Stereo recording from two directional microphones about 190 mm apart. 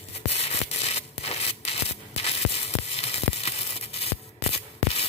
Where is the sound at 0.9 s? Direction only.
30° left (ahead or behind).